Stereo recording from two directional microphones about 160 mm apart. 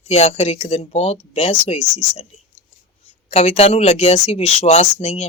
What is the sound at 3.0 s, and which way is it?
Speech, 40° left (ahead or behind).